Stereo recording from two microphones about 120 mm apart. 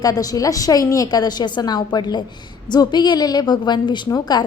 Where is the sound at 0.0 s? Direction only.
30° left (ahead or behind).